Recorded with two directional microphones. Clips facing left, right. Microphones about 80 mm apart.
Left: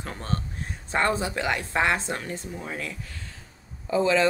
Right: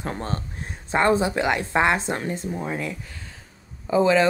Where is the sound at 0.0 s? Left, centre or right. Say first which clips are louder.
Right 3 dB; right.